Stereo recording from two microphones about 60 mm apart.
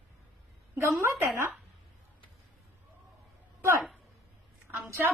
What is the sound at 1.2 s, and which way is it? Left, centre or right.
Speech, right.